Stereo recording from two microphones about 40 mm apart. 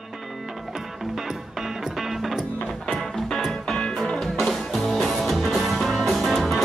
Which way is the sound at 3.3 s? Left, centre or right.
Centre.